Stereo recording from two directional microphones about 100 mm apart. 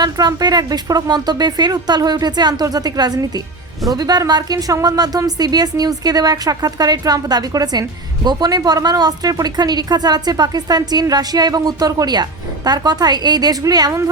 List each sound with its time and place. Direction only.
0.0 s a woman's voice: 40° right (ahead or behind)